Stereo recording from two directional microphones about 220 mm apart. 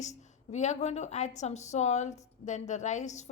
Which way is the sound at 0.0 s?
30° left (ahead or behind).